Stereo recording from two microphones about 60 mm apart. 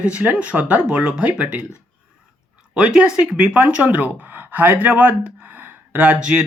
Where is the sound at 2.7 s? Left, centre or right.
Centre.